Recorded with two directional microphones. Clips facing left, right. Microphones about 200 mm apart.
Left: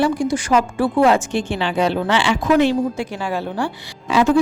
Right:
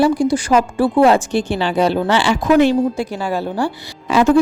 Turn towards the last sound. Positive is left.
turn(degrees=-45)  # may be behind; listen again after turning